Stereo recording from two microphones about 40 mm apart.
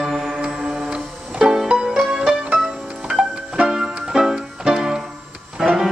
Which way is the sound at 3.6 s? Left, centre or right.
Centre.